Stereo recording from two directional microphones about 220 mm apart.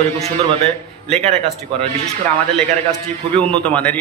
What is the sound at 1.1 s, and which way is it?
Speech, 30° right (ahead or behind).